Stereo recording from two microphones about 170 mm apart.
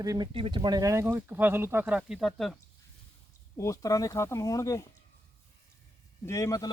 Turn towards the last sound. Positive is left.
turn(degrees=20)  # may be behind; listen again after turning